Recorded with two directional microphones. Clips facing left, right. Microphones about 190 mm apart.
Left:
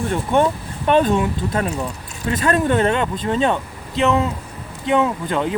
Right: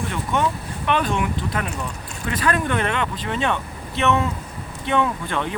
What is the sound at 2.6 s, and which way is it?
Speech, 35° left (ahead or behind).